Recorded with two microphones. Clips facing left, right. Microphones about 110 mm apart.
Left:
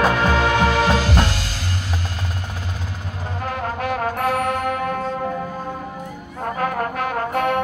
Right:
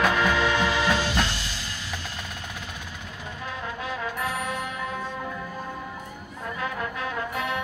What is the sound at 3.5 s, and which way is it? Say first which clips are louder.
Music: left 9 dB; 65° left (ahead or behind).